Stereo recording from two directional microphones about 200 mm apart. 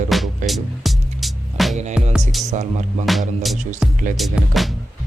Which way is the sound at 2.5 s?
35° right (ahead or behind).